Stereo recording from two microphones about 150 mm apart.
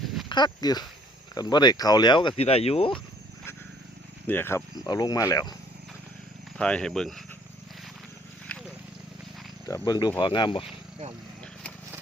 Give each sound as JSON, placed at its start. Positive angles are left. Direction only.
{"t": 0.3, "sound": "speech", "side_deg": 30}
{"t": 4.3, "sound": "speech", "side_deg": 15}
{"t": 4.7, "sound": "speech", "side_deg": 25}
{"t": 6.6, "sound": "speech", "side_deg": 5}
{"t": 8.5, "sound": "run", "side_deg": 10}
{"t": 9.6, "sound": "speech", "side_deg": 25}